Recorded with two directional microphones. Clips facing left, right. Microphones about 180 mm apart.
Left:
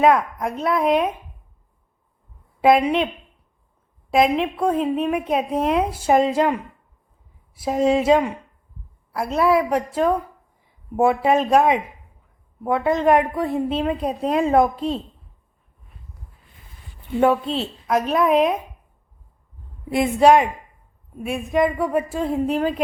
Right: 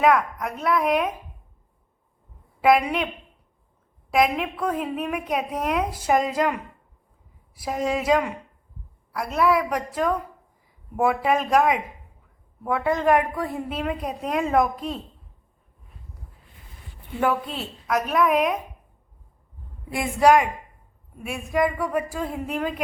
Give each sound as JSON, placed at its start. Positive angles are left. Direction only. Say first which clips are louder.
{"t": 0.0, "sound": "a woman's voice", "louder": "left 3 dB", "side_deg": 25}
{"t": 2.6, "sound": "a woman's voice", "louder": "left 3 dB", "side_deg": 25}
{"t": 4.1, "sound": "a woman's voice", "louder": "left 4 dB", "side_deg": 25}
{"t": 17.2, "sound": "a woman's voice", "louder": "left 6 dB", "side_deg": 25}
{"t": 19.9, "sound": "a woman's voice", "louder": "left 3 dB", "side_deg": 25}